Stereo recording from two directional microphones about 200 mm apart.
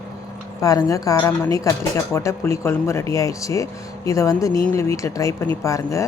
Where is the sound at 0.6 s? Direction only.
15° left (ahead or behind).